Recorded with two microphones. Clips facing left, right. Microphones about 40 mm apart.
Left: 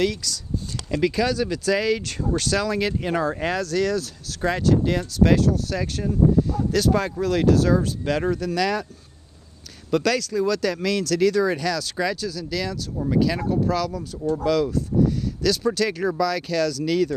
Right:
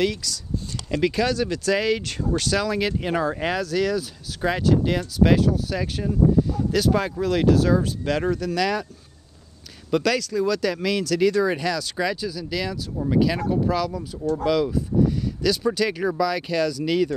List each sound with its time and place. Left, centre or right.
0.0 s speech: centre
9.8 s speech: centre